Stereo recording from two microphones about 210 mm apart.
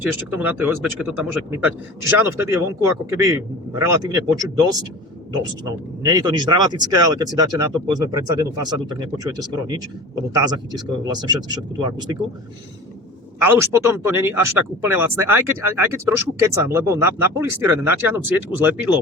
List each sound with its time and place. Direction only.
0.0 s speech: 10° right (ahead or behind)
13.4 s speech: 10° right (ahead or behind)